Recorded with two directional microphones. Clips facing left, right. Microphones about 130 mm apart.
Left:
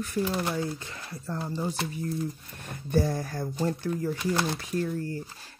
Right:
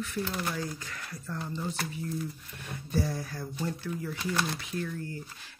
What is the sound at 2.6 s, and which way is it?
Speech, 50° left (ahead or behind).